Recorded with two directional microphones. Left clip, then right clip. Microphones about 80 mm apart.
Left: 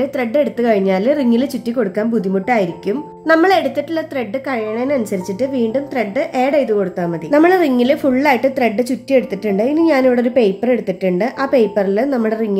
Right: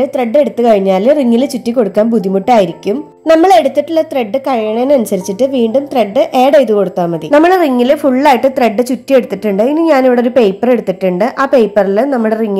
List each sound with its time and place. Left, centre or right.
0.0 s a woman's voice: right
2.0 s a woman's voice: right
3.6 s a woman's voice: right
7.3 s a woman's voice: centre
8.4 s a woman's voice: centre